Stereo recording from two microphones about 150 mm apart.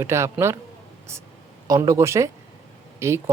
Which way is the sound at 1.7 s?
20° right (ahead or behind).